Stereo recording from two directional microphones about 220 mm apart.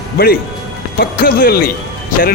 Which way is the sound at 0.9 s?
40° left (ahead or behind).